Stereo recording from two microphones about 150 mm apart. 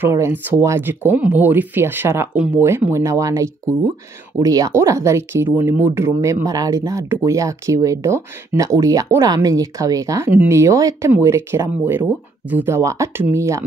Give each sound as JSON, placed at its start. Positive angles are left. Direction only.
{"t": 0.0, "sound": "speech", "side_deg": -15}